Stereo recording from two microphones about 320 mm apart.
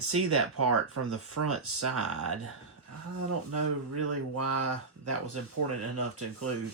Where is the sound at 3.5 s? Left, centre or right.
Right.